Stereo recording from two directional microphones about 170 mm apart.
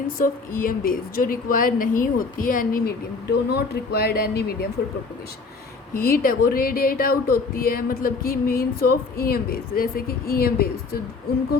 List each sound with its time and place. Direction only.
0.2 s speech: 55° left (ahead or behind)
5.9 s speech: 55° left (ahead or behind)